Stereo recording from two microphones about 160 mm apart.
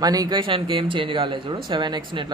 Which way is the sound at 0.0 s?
25° right (ahead or behind).